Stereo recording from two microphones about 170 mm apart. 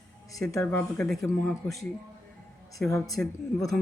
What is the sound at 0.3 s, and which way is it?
Speech, 20° left (ahead or behind).